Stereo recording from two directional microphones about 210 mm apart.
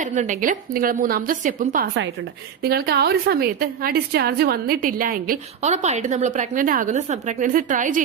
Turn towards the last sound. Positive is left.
turn(degrees=-40)  # may be behind; listen again after turning